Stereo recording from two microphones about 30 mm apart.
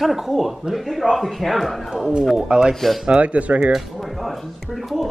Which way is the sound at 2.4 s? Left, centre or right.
Right.